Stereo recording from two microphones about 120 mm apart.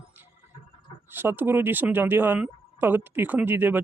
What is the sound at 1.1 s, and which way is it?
Speech, 15° right (ahead or behind).